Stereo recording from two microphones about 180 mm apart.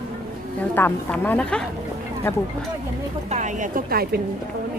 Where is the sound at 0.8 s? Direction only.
10° left (ahead or behind).